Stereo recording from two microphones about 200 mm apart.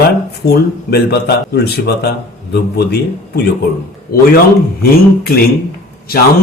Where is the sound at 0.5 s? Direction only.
50° left (ahead or behind).